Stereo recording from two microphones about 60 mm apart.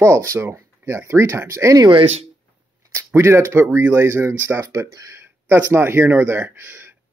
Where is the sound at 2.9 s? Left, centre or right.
Right.